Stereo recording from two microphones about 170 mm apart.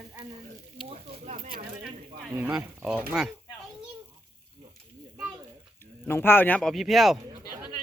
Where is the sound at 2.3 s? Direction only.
10° right (ahead or behind).